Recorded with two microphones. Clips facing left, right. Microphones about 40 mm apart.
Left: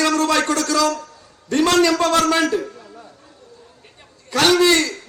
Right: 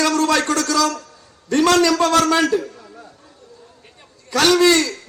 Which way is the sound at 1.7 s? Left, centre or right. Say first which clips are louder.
Even; left.